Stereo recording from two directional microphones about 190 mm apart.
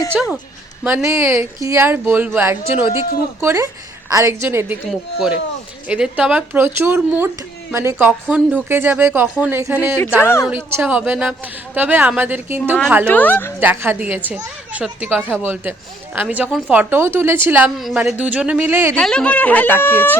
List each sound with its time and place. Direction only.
0.1 s a woman's voice: centre (ahead or behind)
10.2 s speech: 15° left (ahead or behind)
10.5 s a woman's voice: 10° right (ahead or behind)
13.1 s speech: 10° left (ahead or behind)
13.6 s a woman's voice: 10° right (ahead or behind)
18.9 s speech: 5° left (ahead or behind)